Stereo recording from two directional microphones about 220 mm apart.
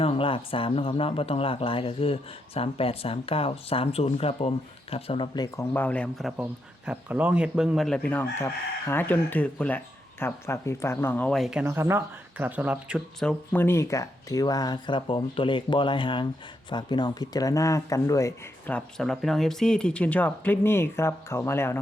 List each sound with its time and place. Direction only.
0.0 s speech: 25° left (ahead or behind)